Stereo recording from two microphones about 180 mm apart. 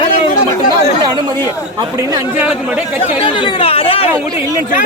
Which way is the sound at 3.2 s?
30° left (ahead or behind).